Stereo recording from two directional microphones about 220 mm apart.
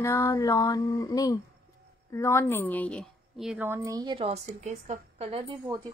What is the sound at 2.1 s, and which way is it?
A woman's voice, 10° left (ahead or behind).